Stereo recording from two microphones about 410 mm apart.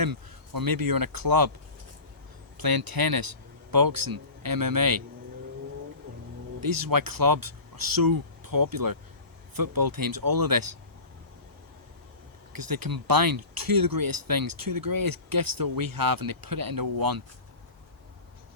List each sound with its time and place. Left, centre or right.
0.0 s speech: right
2.6 s speech: right
6.6 s speech: right
12.5 s speech: right